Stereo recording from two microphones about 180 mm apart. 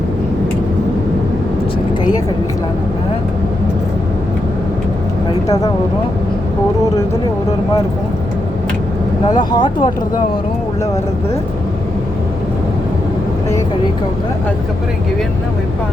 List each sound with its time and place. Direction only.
5.5 s speech: 20° left (ahead or behind)
9.3 s speech: 25° left (ahead or behind)